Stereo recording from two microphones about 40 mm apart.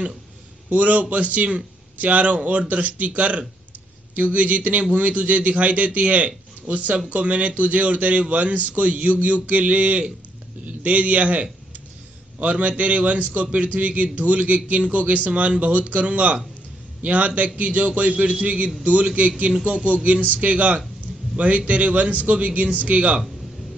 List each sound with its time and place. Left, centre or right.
0.7 s a man's voice: right